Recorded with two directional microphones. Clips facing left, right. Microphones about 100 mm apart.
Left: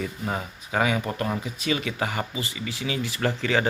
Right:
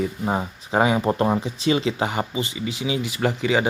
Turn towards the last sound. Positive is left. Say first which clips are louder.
# right 3 dB
turn(degrees=-15)  # may be behind; listen again after turning